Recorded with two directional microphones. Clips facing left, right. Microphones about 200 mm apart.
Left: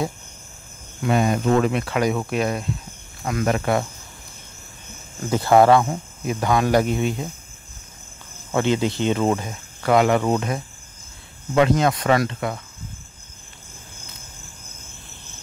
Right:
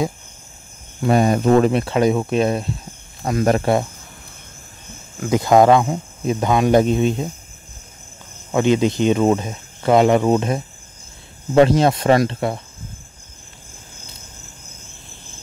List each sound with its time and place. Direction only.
1.0 s speech: 40° right (ahead or behind)
5.3 s speech: 15° right (ahead or behind)
8.5 s speech: 15° right (ahead or behind)
11.5 s speech: 35° right (ahead or behind)